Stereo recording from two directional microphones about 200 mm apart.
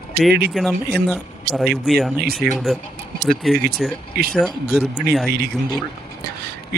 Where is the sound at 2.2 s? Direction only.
50° right (ahead or behind).